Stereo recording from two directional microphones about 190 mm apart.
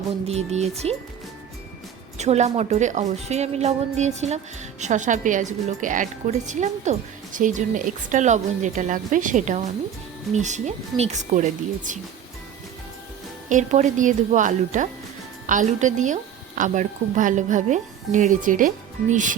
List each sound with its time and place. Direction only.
0.3 s a woman's voice: 35° right (ahead or behind)
2.1 s a woman's voice: 35° right (ahead or behind)
13.5 s a woman's voice: 40° right (ahead or behind)